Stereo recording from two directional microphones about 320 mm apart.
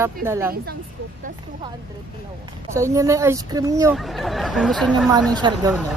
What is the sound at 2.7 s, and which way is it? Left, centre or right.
Speech, centre.